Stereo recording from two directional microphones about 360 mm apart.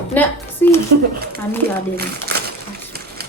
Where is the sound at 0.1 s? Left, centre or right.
Centre.